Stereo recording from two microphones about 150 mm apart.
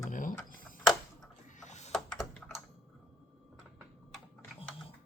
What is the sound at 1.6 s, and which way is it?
Typing, 50° left (ahead or behind).